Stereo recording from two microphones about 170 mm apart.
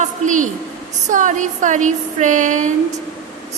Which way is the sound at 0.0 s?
50° right (ahead or behind).